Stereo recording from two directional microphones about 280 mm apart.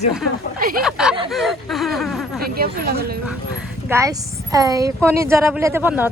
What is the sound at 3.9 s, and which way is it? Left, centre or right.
A woman's voice, centre.